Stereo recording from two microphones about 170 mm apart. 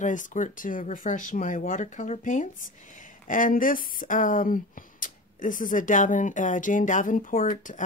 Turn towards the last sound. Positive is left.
turn(degrees=50)  # may be behind; listen again after turning